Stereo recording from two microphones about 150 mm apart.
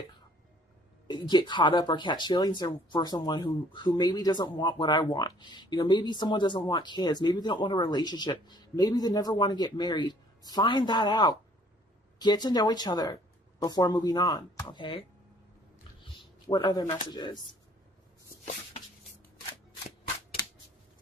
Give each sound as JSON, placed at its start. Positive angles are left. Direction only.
{"t": 1.0, "sound": "speech", "side_deg": 30}
{"t": 16.5, "sound": "speech", "side_deg": 30}